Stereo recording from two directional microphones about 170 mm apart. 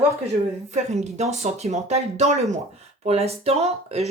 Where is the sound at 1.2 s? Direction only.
40° right (ahead or behind).